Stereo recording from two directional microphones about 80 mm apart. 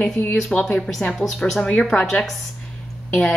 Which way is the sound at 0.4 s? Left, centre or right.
Centre.